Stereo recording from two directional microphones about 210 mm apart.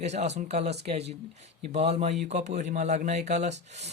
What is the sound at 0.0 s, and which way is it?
Speech, 30° right (ahead or behind).